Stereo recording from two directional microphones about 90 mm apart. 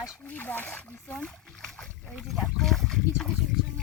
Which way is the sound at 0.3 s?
20° left (ahead or behind).